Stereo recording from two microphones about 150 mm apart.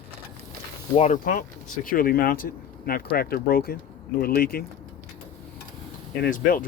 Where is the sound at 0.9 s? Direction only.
55° left (ahead or behind); by 4.6 s 85° left.